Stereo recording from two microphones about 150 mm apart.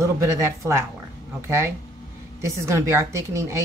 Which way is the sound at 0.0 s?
20° right (ahead or behind).